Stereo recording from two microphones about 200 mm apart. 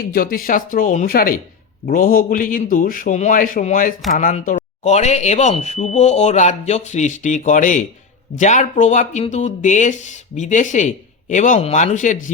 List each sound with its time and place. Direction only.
0.1 s a man's voice: 45° left (ahead or behind)